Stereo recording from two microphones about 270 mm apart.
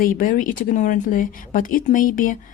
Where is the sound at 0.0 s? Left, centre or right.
Left.